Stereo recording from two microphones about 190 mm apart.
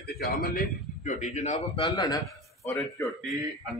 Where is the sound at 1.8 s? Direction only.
20° left (ahead or behind).